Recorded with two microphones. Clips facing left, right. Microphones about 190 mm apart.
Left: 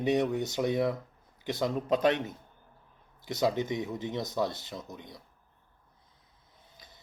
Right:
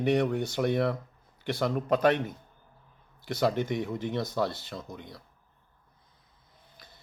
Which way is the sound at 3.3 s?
20° left (ahead or behind).